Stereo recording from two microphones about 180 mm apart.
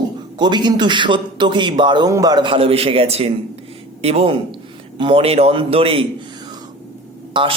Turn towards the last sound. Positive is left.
turn(degrees=-25)  # may be behind; listen again after turning